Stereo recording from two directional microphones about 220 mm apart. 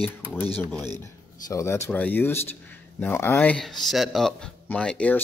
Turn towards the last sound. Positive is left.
turn(degrees=5)  # may be behind; listen again after turning